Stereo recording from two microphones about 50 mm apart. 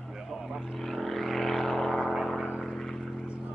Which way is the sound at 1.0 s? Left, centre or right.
Centre.